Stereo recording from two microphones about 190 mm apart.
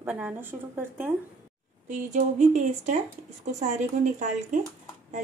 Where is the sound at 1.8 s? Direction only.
40° right (ahead or behind).